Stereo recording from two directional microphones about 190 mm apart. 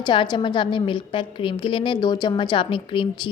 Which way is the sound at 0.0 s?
25° left (ahead or behind).